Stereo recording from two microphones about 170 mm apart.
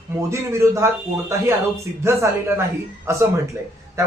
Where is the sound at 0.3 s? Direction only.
15° right (ahead or behind).